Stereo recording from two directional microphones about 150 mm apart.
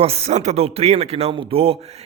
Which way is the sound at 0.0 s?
40° right (ahead or behind).